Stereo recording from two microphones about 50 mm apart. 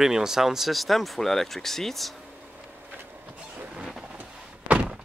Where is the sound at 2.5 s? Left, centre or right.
Right.